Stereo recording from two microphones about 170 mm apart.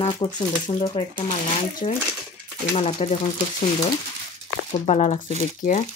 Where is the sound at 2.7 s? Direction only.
35° left (ahead or behind).